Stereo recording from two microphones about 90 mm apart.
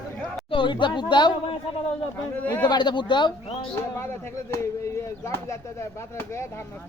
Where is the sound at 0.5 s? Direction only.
60° left (ahead or behind).